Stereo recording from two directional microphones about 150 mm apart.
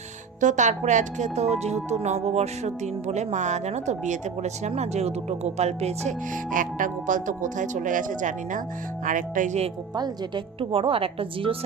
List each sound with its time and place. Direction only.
0.3 s a woman's voice: 55° right (ahead or behind)
6.3 s speech: 65° right (ahead or behind)
9.9 s a woman's voice: 30° right (ahead or behind)